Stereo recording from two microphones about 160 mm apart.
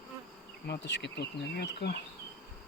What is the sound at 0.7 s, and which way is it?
Speech, 90° left.